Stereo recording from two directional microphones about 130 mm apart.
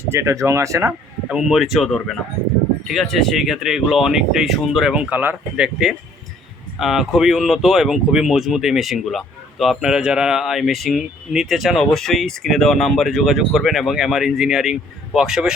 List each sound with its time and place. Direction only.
0.1 s speech: 20° right (ahead or behind)
1.3 s speech: 5° right (ahead or behind)